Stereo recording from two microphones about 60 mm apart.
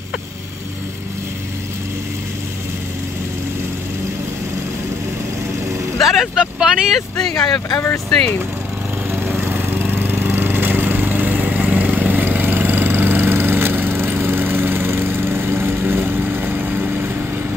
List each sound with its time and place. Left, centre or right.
5.9 s speech: centre
6.3 s speech: centre
7.2 s speech: centre
9.1 s a sound: right